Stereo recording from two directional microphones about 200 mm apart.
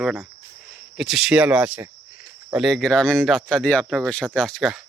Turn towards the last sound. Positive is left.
turn(degrees=0)  # may be behind; listen again after turning